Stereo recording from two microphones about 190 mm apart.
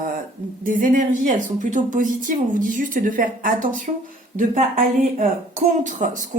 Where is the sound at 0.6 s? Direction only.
45° right (ahead or behind).